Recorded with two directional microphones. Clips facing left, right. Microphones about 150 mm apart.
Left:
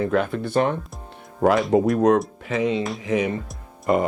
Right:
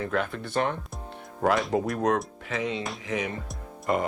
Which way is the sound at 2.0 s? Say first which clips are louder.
Left 7 dB; 20° left (ahead or behind).